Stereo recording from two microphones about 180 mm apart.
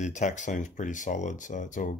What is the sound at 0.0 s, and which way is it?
Speech, 40° left (ahead or behind).